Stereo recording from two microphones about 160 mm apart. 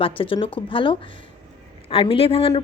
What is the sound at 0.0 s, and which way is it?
A woman's voice, 35° left (ahead or behind).